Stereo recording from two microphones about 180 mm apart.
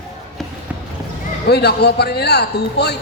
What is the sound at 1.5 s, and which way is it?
A man's voice, 65° left (ahead or behind).